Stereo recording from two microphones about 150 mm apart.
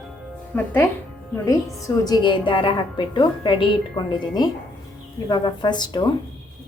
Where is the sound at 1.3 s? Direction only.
20° left (ahead or behind).